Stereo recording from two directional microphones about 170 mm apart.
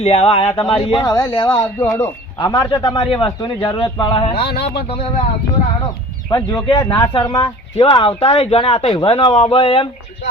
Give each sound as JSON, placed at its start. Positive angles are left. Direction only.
{"t": 0.0, "sound": "speech", "side_deg": 40}
{"t": 4.4, "sound": "speech", "side_deg": 70}
{"t": 6.7, "sound": "speech", "side_deg": 20}